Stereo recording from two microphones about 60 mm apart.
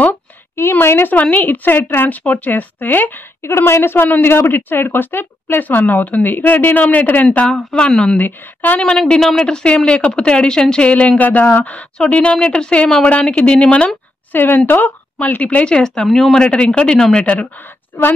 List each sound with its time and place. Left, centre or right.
0.6 s a woman's voice: left
1.1 s a woman's voice: left
7.7 s speech: centre
8.2 s speech: left
8.8 s speech: centre
14.3 s speech: left
15.4 s speech: centre